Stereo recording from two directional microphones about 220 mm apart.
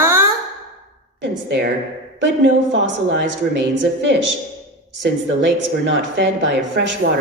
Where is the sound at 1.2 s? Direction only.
50° right (ahead or behind).